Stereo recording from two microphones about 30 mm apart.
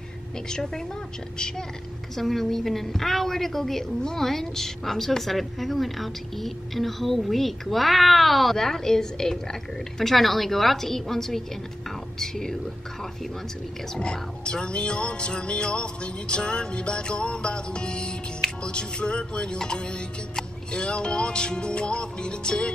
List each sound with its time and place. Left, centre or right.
0.5 s a woman's voice: centre
2.1 s a woman's voice: centre
8.5 s a woman's voice: centre
10.1 s a woman's voice: centre
14.4 s music: left